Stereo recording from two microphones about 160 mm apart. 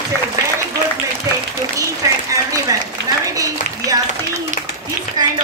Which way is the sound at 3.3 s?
20° right (ahead or behind).